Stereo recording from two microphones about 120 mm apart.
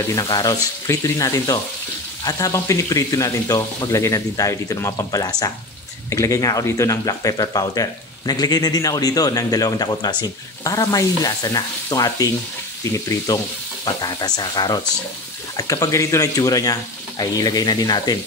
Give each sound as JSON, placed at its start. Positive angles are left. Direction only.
{"t": 0.1, "sound": "speech", "side_deg": 30}